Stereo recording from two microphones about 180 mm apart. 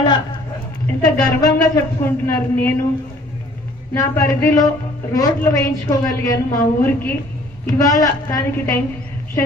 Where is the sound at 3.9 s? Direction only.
15° left (ahead or behind).